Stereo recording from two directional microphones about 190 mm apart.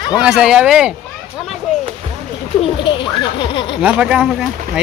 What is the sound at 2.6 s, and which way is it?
Speech, 25° left (ahead or behind).